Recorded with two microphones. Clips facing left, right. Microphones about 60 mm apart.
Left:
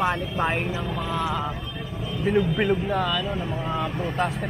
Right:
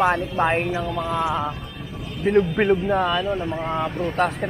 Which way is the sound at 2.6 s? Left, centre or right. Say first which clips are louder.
Right 4 dB; right.